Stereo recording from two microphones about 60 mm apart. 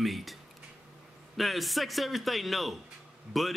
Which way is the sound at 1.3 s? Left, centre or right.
Centre.